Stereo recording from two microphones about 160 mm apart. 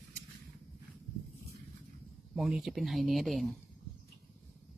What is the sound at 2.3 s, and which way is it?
Speech, centre (ahead or behind).